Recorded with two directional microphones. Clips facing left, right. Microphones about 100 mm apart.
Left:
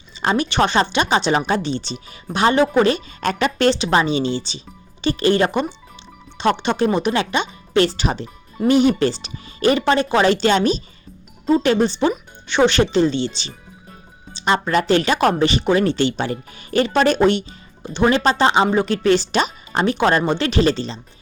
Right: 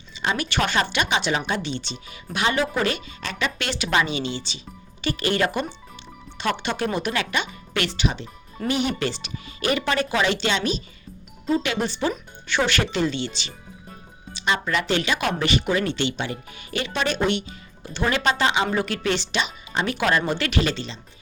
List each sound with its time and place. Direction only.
0.3 s speech: 25° left (ahead or behind)
3.2 s speech: 45° left (ahead or behind)
15.4 s speech: 30° left (ahead or behind)
17.8 s speech: 25° left (ahead or behind)
19.0 s speech: 40° left (ahead or behind)
19.8 s speech: 30° left (ahead or behind)